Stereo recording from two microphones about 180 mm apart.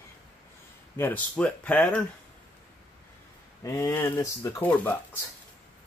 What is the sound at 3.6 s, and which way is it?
Speech, 15° left (ahead or behind).